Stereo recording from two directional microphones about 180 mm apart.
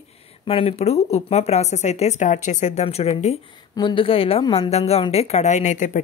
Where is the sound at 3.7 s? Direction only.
25° left (ahead or behind); by 6.0 s 40° left (ahead or behind).